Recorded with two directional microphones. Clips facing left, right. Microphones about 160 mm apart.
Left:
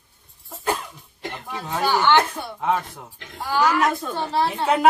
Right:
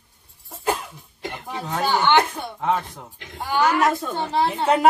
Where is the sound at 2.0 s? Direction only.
20° right (ahead or behind).